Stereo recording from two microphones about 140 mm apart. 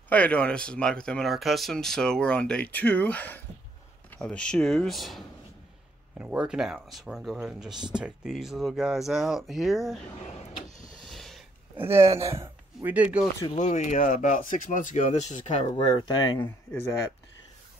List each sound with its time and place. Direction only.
0.1 s speech: 10° left (ahead or behind)
11.1 s a sound: centre (ahead or behind)
11.7 s speech: 15° right (ahead or behind)
13.6 s speech: 55° left (ahead or behind)
15.7 s speech: 40° left (ahead or behind)
16.1 s speech: 30° left (ahead or behind)
16.4 s speech: 20° left (ahead or behind)